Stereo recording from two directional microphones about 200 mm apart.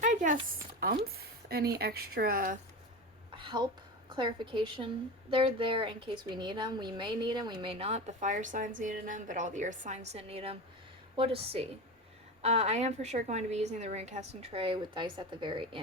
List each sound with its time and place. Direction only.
0.0 s a sound: 40° right (ahead or behind)
0.8 s speech: 50° right (ahead or behind)
3.3 s a woman's voice: 25° right (ahead or behind)